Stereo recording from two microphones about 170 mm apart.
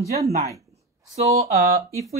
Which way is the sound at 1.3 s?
20° right (ahead or behind).